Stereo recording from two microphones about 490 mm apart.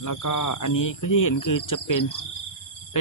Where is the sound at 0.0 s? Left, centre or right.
Left.